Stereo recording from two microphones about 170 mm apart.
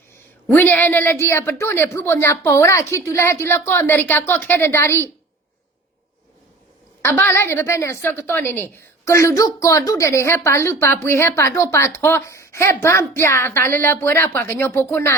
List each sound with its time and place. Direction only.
0.4 s a woman's voice: 10° left (ahead or behind)
7.0 s a woman's voice: 10° left (ahead or behind)